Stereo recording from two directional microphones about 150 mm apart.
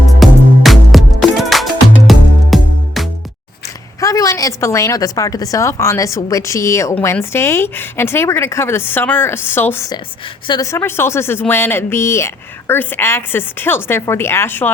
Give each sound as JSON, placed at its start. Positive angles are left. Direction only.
{"t": 0.2, "sound": "music", "side_deg": 0}
{"t": 4.0, "sound": "a woman's voice", "side_deg": 20}
{"t": 10.4, "sound": "speech", "side_deg": 30}
{"t": 10.7, "sound": "speech", "side_deg": 15}